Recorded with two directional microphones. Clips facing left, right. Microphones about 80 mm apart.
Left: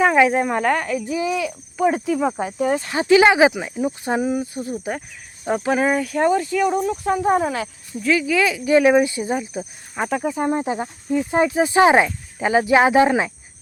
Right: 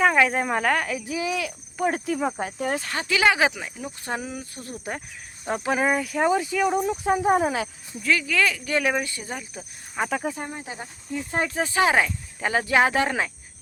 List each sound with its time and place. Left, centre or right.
0.0 s speech: centre
3.0 s speech: left
4.6 s speech: centre
8.0 s speech: centre
9.9 s speech: centre
10.4 s speech: left
11.1 s speech: centre
11.7 s speech: left